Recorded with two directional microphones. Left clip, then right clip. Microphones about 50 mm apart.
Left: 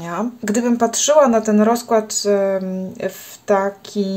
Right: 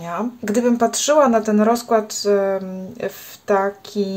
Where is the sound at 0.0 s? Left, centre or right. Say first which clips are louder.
Left 1 dB; left.